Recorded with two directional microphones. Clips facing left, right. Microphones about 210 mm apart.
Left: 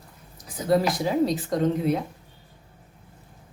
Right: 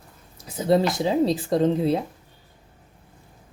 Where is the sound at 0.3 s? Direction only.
25° right (ahead or behind).